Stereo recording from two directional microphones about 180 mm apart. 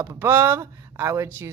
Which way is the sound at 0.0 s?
15° right (ahead or behind).